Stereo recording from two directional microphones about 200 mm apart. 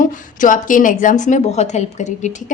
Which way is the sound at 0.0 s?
40° left (ahead or behind).